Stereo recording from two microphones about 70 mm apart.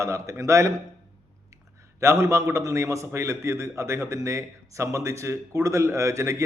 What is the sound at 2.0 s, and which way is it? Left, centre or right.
A man's voice, right.